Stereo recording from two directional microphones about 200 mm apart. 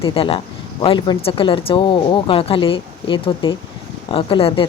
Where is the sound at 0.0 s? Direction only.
25° left (ahead or behind).